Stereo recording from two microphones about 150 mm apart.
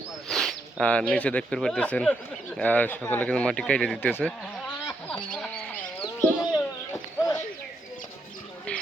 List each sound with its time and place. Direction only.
0.3 s speech: centre (ahead or behind)
5.0 s chicken: 5° left (ahead or behind)
6.4 s a sound: 25° left (ahead or behind)